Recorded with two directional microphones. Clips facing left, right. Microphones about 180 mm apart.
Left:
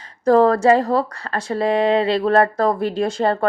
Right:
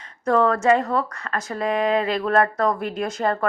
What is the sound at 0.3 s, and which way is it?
Speech, 35° left (ahead or behind).